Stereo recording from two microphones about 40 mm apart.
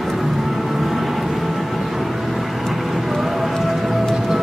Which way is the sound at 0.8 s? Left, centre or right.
Centre.